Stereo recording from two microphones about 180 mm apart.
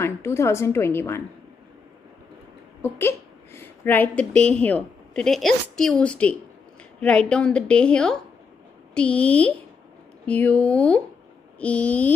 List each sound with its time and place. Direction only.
0.0 s a woman's voice: 15° left (ahead or behind)
2.8 s a woman's voice: 15° left (ahead or behind)